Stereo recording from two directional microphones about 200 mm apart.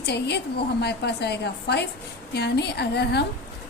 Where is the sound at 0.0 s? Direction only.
55° left (ahead or behind).